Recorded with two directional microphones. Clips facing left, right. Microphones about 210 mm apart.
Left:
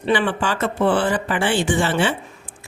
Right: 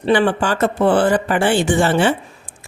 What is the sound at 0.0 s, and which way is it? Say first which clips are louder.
Speech: right 4 dB; 40° right (ahead or behind).